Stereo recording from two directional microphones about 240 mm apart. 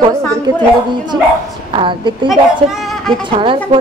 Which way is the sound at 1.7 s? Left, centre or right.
Centre.